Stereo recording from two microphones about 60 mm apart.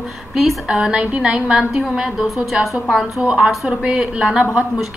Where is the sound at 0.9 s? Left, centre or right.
Centre.